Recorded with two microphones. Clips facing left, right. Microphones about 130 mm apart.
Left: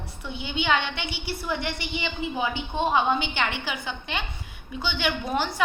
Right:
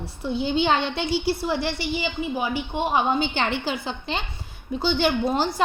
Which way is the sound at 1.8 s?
25° left (ahead or behind).